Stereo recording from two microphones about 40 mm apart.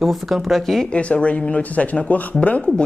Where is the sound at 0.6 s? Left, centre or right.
Centre.